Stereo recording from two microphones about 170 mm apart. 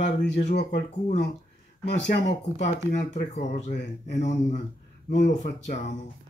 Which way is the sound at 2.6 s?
45° left (ahead or behind).